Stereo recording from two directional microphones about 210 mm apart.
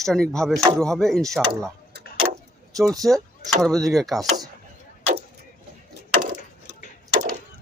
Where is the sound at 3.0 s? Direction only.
Centre (ahead or behind).